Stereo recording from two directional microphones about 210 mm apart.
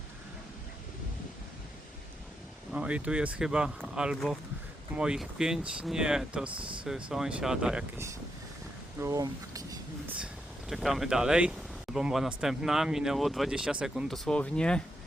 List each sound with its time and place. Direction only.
2.7 s speech: 5° right (ahead or behind)
6.5 s speech: 25° right (ahead or behind)
6.8 s speech: centre (ahead or behind)
10.7 s speech: centre (ahead or behind)